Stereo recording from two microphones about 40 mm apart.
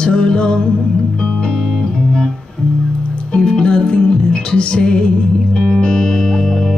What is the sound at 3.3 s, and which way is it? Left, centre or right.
Music, left.